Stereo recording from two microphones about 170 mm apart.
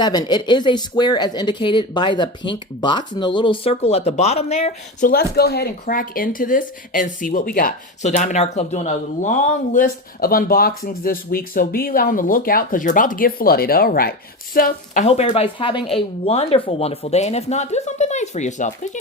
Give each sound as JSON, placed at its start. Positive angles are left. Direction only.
{"t": 0.0, "sound": "speech", "side_deg": 25}
{"t": 8.1, "sound": "speech", "side_deg": 45}
{"t": 15.0, "sound": "speech", "side_deg": 40}